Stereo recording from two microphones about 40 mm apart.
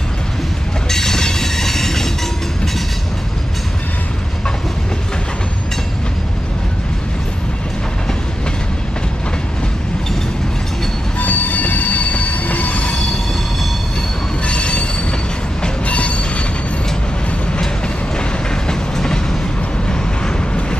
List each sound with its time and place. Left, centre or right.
0.8 s train: centre
11.1 s train: left
14.4 s train wheels squealing: left
15.8 s train: left
18.1 s train: centre